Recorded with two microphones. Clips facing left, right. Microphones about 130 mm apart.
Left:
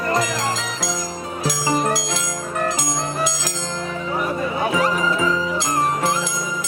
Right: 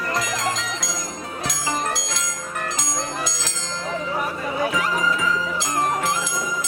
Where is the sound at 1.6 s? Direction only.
35° left (ahead or behind).